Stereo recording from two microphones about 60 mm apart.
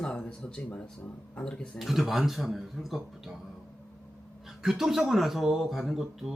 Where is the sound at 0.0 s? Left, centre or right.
Centre.